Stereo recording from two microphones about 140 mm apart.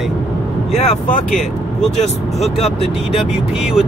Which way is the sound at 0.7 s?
50° left (ahead or behind).